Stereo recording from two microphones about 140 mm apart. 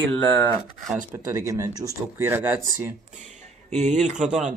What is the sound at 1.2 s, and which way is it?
Speech, 20° right (ahead or behind).